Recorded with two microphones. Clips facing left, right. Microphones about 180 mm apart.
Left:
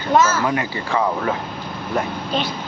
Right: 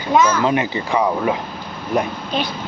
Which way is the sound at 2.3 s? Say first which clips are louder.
Right 1 dB; centre (ahead or behind).